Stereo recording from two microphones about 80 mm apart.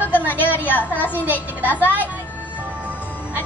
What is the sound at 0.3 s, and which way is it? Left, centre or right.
A woman's voice, left.